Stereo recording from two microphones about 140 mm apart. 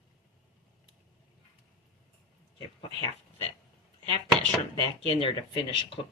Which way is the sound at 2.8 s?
40° left (ahead or behind).